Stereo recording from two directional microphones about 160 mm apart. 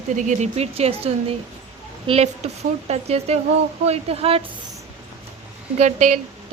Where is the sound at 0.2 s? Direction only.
50° right (ahead or behind).